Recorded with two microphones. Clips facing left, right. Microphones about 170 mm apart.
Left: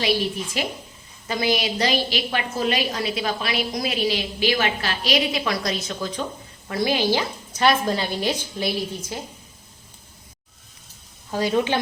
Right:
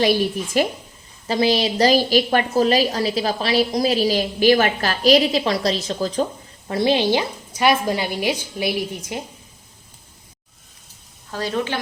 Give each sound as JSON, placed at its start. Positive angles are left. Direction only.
{"t": 0.6, "sound": "speech", "side_deg": -45}
{"t": 1.3, "sound": "a woman's voice", "side_deg": -30}
{"t": 11.3, "sound": "a woman's voice", "side_deg": 15}